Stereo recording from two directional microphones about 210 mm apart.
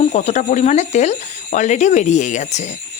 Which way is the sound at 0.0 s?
35° left (ahead or behind).